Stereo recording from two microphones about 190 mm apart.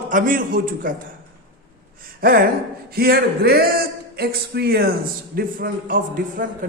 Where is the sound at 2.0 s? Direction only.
50° right (ahead or behind).